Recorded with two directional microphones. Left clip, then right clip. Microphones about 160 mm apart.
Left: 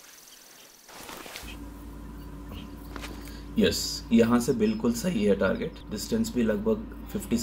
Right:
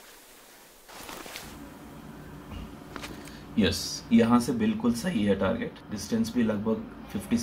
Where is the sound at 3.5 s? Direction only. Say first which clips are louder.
Left 2 dB; 15° left (ahead or behind).